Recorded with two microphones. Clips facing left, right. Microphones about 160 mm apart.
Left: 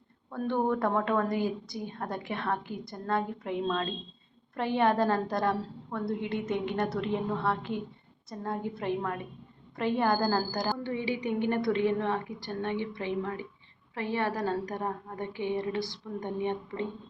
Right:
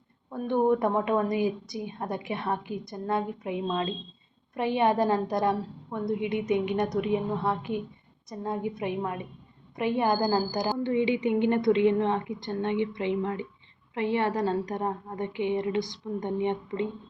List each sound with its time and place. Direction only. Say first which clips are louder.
0.3 s a woman's voice: right 4 dB; 15° right (ahead or behind)